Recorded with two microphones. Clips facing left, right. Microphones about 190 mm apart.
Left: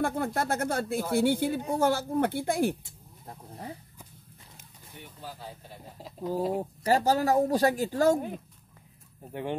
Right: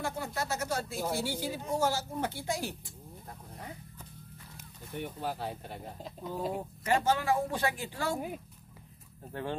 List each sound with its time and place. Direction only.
0.0 s speech: 55° left (ahead or behind)
3.3 s a sound: 30° left (ahead or behind)
4.9 s speech: 65° right (ahead or behind)
5.9 s speech: centre (ahead or behind)
6.5 s speech: 35° left (ahead or behind)
9.3 s speech: 15° left (ahead or behind)